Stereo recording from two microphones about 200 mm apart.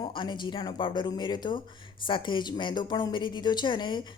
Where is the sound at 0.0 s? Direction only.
25° left (ahead or behind).